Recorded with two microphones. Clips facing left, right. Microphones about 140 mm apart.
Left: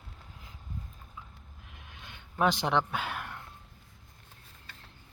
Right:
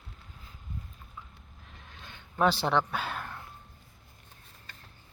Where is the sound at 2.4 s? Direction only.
15° left (ahead or behind).